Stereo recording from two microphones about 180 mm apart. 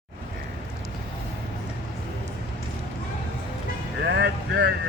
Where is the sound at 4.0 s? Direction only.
70° right (ahead or behind).